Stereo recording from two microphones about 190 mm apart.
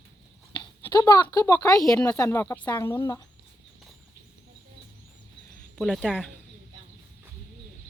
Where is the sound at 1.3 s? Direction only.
15° left (ahead or behind).